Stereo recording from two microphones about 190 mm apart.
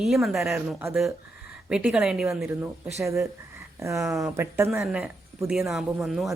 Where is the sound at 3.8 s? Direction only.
15° right (ahead or behind); by 6.3 s centre (ahead or behind).